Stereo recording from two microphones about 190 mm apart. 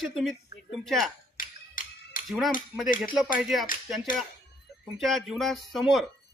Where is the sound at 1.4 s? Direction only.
45° left (ahead or behind).